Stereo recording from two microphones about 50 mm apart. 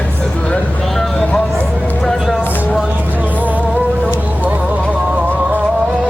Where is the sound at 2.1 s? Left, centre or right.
Centre.